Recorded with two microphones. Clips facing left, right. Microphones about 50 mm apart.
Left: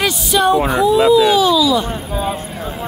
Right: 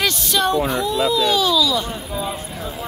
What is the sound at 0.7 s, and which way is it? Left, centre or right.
A child's voice, centre.